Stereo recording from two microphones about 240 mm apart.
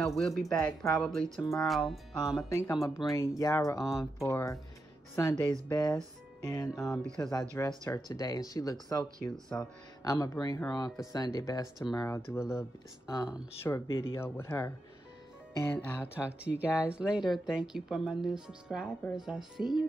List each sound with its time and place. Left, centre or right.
0.0 s speech: centre
16.2 s speech: centre